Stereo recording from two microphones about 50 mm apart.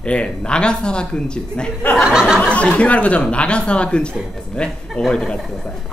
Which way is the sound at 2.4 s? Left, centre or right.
Left.